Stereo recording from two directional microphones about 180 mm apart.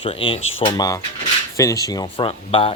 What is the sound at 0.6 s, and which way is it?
Speech, 25° left (ahead or behind).